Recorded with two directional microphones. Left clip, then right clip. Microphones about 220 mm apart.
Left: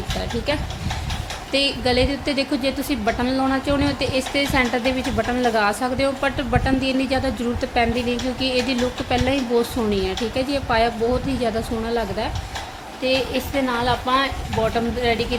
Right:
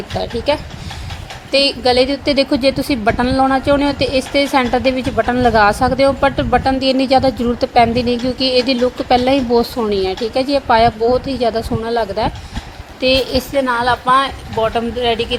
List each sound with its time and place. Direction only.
0.2 s a woman's voice: 20° right (ahead or behind)